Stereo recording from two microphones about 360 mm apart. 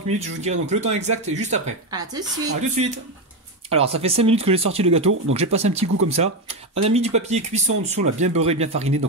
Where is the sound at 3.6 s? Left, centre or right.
Centre.